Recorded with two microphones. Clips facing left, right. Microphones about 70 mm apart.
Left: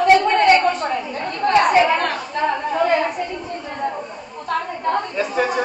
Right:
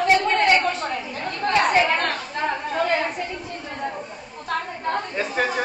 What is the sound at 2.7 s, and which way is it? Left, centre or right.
Chatter, centre.